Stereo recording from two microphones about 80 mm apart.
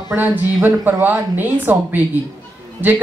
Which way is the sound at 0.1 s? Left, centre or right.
Right.